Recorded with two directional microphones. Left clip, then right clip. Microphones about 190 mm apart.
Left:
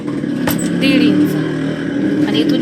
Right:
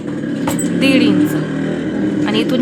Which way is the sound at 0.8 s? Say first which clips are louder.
Even; 15° right (ahead or behind).